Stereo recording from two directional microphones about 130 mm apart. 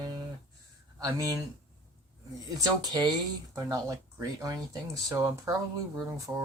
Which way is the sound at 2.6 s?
30° right (ahead or behind).